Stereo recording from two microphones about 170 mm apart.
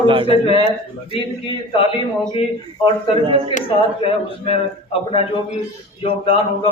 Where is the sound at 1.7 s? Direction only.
35° left (ahead or behind).